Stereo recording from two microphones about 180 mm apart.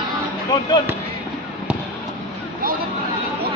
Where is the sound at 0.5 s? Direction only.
25° left (ahead or behind).